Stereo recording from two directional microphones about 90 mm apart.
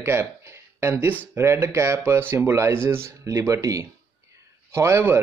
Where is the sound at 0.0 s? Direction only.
25° right (ahead or behind).